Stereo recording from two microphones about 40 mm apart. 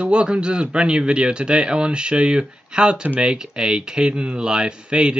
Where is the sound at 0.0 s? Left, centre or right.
Right.